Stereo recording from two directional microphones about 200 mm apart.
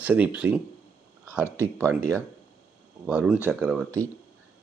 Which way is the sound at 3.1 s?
5° right (ahead or behind).